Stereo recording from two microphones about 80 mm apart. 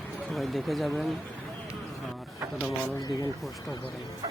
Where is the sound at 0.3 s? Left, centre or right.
Centre.